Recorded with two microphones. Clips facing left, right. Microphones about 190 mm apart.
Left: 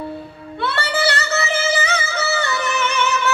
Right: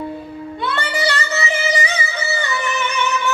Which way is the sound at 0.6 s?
15° right (ahead or behind).